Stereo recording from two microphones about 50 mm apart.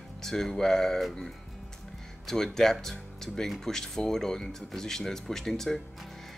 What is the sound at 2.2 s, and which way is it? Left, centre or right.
Speech, centre.